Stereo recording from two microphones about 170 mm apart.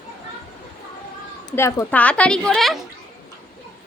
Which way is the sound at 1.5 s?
15° left (ahead or behind).